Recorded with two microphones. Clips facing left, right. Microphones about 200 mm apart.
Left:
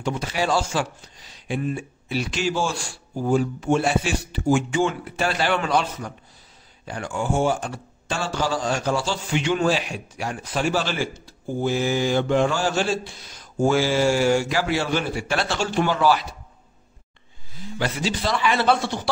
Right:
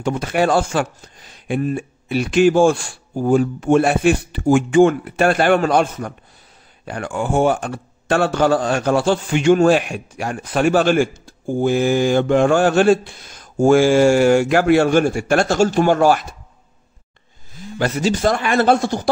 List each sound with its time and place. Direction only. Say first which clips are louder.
0.0 s speech: right 7 dB; 55° right (ahead or behind)
17.7 s speech: right 7 dB; 45° right (ahead or behind)